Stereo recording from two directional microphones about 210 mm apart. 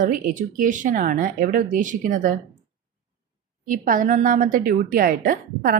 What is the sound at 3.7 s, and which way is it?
A woman's voice, 40° right (ahead or behind).